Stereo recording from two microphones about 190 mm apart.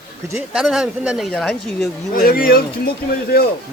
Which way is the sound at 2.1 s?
50° left (ahead or behind).